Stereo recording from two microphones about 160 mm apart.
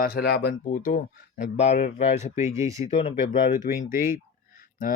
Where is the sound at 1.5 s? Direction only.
40° left (ahead or behind).